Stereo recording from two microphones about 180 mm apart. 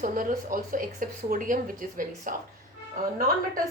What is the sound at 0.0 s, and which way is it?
Speech, 50° right (ahead or behind).